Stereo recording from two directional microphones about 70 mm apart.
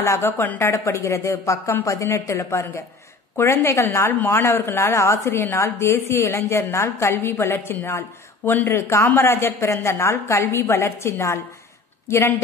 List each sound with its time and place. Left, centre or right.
0.0 s a woman's voice: left
4.1 s a woman's voice: left